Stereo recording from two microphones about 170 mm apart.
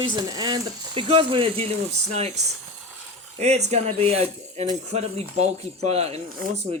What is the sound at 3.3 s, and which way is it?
Speech, 40° right (ahead or behind).